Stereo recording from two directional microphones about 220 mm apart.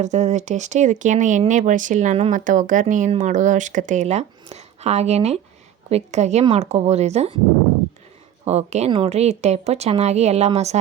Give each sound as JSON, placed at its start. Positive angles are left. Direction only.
{"t": 0.0, "sound": "a woman's voice", "side_deg": -30}
{"t": 8.4, "sound": "a woman's voice", "side_deg": -30}